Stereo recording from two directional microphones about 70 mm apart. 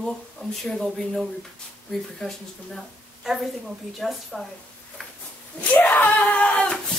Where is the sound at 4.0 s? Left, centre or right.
Centre.